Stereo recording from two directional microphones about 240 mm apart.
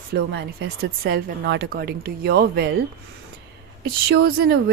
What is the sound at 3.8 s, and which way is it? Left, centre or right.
Speech, right.